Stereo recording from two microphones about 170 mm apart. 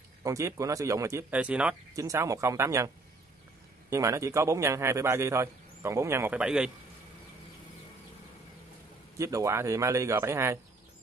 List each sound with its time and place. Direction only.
0.2 s a man's voice: 20° right (ahead or behind)
2.0 s a man's voice: 20° right (ahead or behind)
3.9 s a man's voice: 15° right (ahead or behind)
9.2 s a man's voice: 20° right (ahead or behind)